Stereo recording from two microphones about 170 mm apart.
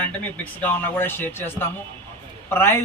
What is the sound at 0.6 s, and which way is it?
Speech, 10° left (ahead or behind).